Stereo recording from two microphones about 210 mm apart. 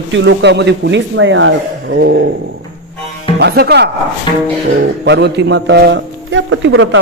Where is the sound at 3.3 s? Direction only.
50° right (ahead or behind).